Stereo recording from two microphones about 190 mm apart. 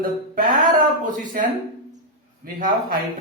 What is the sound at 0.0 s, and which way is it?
A man's voice, 45° right (ahead or behind).